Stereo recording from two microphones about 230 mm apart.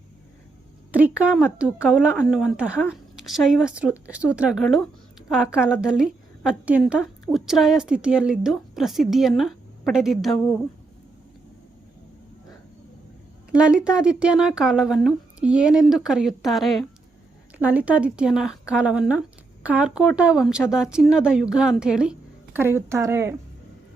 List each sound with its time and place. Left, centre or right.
0.9 s a woman's voice: centre
13.5 s a woman's voice: centre